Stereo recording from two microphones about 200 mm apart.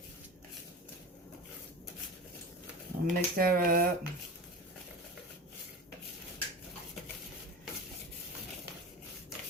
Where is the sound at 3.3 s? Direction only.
45° right (ahead or behind).